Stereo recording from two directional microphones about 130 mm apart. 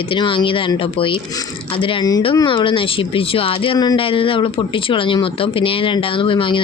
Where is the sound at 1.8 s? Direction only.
35° left (ahead or behind).